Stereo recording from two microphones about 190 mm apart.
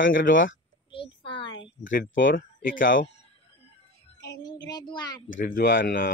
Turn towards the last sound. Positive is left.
turn(degrees=45)  # may be behind; listen again after turning